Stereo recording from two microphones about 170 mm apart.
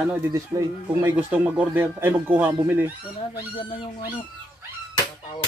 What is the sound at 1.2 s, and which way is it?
Speech, 10° right (ahead or behind).